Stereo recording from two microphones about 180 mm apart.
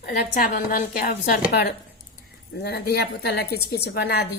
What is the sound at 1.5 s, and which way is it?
A woman's voice, 65° left (ahead or behind).